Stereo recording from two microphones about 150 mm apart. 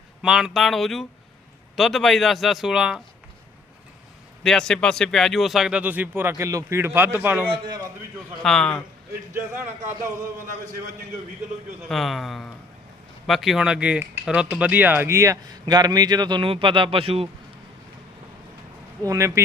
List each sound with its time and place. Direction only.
0.2 s a man's voice: 5° right (ahead or behind)
4.4 s speech: 5° left (ahead or behind); by 7.4 s 15° right (ahead or behind)
7.5 s a man's voice: 30° right (ahead or behind)
8.4 s a man's voice: 5° left (ahead or behind)
9.3 s speech: 15° right (ahead or behind)
11.9 s a man's voice: centre (ahead or behind); by 17.2 s 40° right (ahead or behind)
19.0 s speech: 20° right (ahead or behind)